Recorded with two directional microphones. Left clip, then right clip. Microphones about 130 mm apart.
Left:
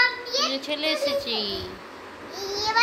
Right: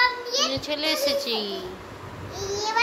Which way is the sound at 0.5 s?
Centre (ahead or behind).